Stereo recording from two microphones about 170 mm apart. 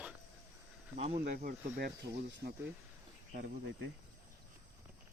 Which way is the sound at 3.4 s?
90° right.